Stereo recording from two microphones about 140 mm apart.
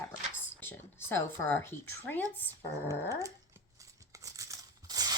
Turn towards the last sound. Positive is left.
turn(degrees=-30)  # may be behind; listen again after turning